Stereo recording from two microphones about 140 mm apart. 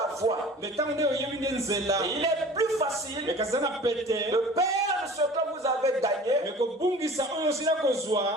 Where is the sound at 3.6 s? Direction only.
25° right (ahead or behind).